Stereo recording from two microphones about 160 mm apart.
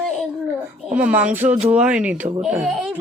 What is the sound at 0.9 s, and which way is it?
Speech, 10° right (ahead or behind).